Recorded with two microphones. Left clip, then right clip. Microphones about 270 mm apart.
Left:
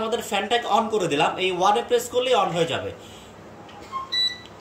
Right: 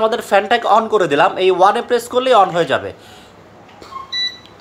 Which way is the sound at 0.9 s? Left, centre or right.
Right.